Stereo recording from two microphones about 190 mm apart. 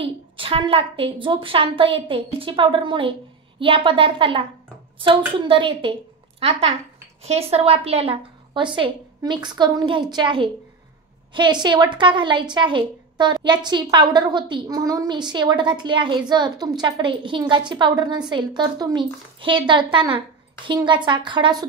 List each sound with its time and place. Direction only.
0.0 s a woman's voice: 30° right (ahead or behind)
7.2 s a woman's voice: 30° right (ahead or behind)